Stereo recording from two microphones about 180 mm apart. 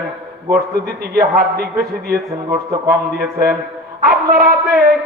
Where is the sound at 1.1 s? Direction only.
55° right (ahead or behind).